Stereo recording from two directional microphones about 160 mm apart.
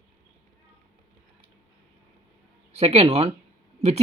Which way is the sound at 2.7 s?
40° right (ahead or behind).